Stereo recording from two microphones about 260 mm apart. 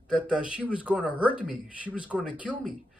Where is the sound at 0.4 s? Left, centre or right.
Centre.